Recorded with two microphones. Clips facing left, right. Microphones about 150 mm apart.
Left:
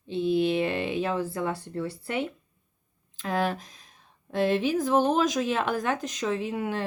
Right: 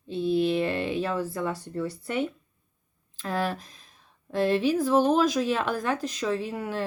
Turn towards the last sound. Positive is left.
turn(degrees=20)  # may be behind; listen again after turning